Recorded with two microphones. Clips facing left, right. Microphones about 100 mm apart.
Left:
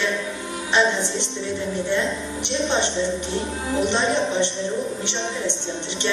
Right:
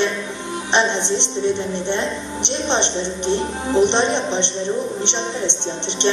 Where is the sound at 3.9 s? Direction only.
25° right (ahead or behind).